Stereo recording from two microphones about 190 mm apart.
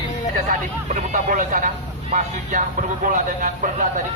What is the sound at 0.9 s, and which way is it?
Speech, 40° right (ahead or behind).